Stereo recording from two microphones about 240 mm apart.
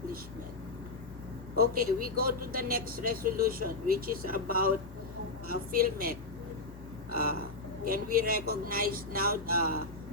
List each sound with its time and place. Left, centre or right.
1.5 s speech: right
7.1 s a sound: right
7.9 s speech: right